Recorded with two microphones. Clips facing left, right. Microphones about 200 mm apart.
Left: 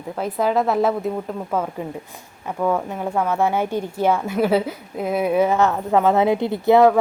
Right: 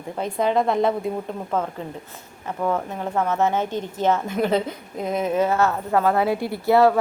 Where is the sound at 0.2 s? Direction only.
5° left (ahead or behind).